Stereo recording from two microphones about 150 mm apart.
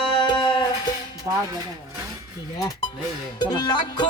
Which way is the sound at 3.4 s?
30° left (ahead or behind).